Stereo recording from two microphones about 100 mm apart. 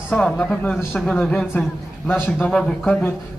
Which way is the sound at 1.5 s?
25° left (ahead or behind).